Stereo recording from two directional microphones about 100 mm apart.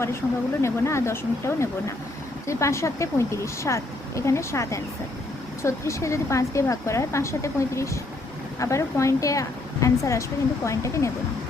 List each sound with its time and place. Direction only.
0.6 s a woman's voice: 25° left (ahead or behind)